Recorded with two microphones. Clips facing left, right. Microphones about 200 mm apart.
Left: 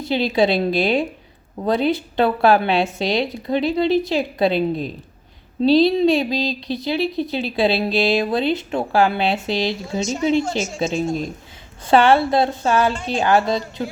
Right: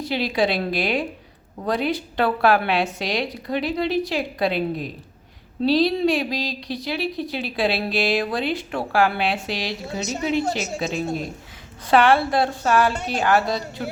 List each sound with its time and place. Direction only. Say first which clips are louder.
0.0 s a woman's voice: left 4 dB; 25° left (ahead or behind)